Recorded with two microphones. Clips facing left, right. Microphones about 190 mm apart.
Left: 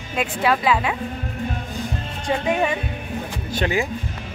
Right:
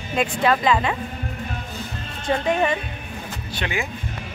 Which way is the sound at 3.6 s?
40° left (ahead or behind).